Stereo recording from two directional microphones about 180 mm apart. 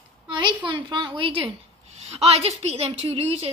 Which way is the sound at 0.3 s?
25° right (ahead or behind).